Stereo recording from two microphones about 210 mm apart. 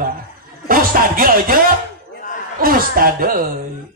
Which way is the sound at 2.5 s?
45° right (ahead or behind).